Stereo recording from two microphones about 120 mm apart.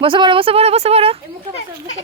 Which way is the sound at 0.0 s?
45° right (ahead or behind).